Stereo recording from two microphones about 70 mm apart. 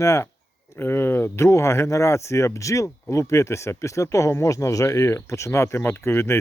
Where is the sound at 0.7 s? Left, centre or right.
Left.